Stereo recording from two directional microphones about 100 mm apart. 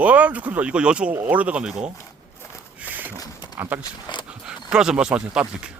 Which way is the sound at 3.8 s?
50° left (ahead or behind).